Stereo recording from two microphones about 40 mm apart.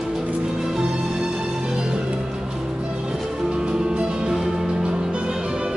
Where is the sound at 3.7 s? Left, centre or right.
Right.